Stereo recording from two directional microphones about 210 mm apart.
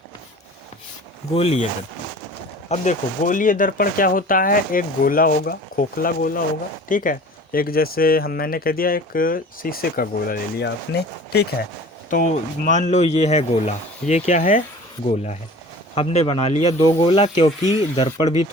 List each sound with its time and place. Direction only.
1.4 s speech: 30° left (ahead or behind)
2.6 s speech: 35° left (ahead or behind); by 11.4 s 50° left (ahead or behind)
12.1 s speech: 40° left (ahead or behind)